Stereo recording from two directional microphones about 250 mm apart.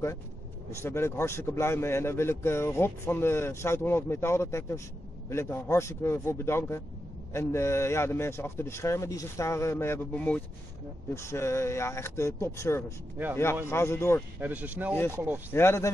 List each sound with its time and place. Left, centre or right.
0.7 s speech: centre
14.4 s speech: centre
15.5 s speech: centre